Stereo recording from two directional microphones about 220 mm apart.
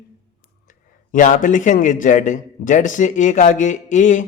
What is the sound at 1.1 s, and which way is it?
A man's voice, 35° left (ahead or behind).